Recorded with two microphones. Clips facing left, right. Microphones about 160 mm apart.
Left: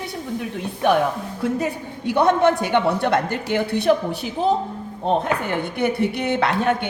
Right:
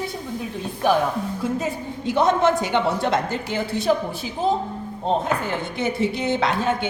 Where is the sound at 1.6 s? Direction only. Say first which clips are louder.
Left 1 dB; 65° left (ahead or behind).